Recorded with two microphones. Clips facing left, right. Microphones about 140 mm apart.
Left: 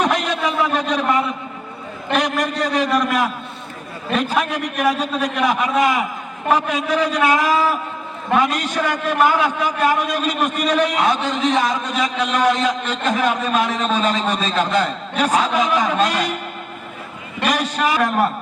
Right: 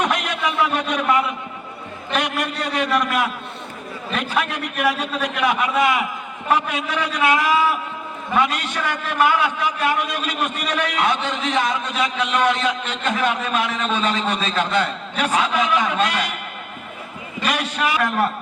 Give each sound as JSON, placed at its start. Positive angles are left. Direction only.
{"t": 0.0, "sound": "a sound", "side_deg": 35}
{"t": 2.1, "sound": "a man's voice", "side_deg": 40}
{"t": 4.5, "sound": "a man's voice", "side_deg": 40}
{"t": 17.5, "sound": "a man's voice", "side_deg": 40}